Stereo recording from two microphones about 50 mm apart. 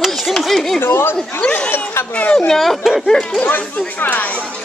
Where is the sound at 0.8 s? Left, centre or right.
Left.